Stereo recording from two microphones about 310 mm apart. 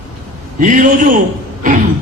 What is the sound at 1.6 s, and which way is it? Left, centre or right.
Speech, right.